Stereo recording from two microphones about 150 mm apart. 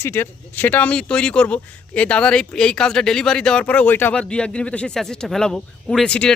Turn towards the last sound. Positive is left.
turn(degrees=5)  # may be behind; listen again after turning